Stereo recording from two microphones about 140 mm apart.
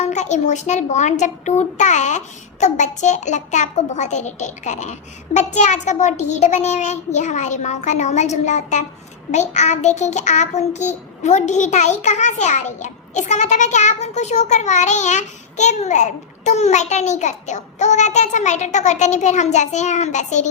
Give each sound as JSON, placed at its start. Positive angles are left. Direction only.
{"t": 0.0, "sound": "a child's voice", "side_deg": 60}